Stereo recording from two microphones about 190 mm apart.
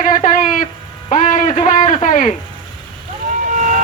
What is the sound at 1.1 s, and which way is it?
Music, 40° left (ahead or behind).